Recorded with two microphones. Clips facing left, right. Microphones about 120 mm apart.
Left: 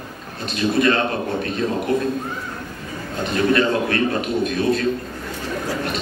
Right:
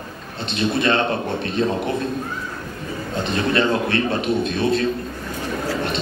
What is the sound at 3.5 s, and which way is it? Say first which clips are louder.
A man's voice: even; 25° right (ahead or behind).